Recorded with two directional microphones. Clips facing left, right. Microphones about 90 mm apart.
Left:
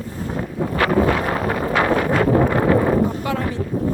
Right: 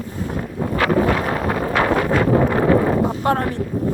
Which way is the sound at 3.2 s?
50° right (ahead or behind).